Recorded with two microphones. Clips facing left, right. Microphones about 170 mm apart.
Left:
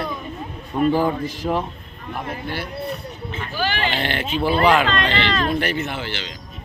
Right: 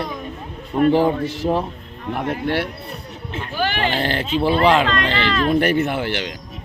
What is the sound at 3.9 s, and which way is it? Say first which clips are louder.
Speech: right 3 dB; 35° right (ahead or behind).